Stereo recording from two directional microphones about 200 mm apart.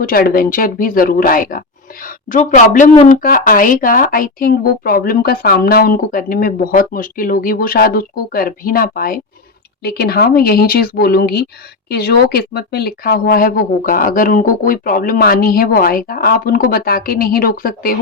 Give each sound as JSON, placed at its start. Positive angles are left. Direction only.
{"t": 0.0, "sound": "speech", "side_deg": 45}